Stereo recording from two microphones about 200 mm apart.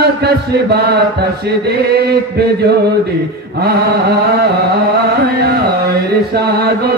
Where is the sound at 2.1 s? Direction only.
55° right (ahead or behind).